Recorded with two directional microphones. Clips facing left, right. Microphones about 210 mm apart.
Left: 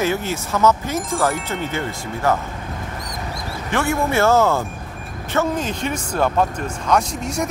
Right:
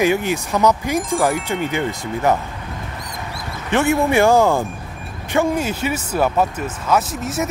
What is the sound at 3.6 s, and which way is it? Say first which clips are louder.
Speech: right 4 dB; 20° right (ahead or behind).